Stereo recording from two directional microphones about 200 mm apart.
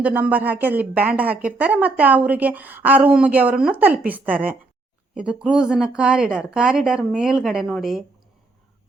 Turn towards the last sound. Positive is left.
turn(degrees=0)  # may be behind; listen again after turning